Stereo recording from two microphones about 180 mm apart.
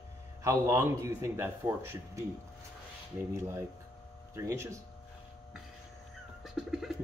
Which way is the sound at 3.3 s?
15° right (ahead or behind).